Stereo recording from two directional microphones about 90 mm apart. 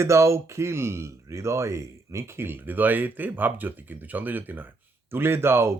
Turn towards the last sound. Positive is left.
turn(degrees=-30)  # may be behind; listen again after turning